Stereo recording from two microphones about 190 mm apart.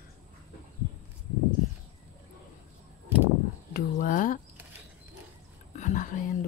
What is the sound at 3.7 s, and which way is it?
Speech, 45° left (ahead or behind).